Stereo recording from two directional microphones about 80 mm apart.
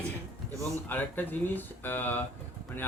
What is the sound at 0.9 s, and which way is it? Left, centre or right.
Speech, left.